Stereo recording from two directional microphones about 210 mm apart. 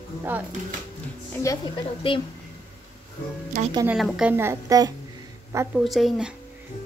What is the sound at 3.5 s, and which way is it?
Speech, 40° right (ahead or behind).